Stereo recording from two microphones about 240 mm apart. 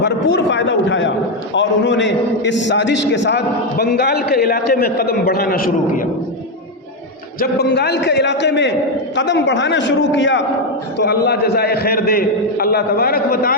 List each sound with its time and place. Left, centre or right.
0.0 s a man's voice: left
7.3 s a man's voice: left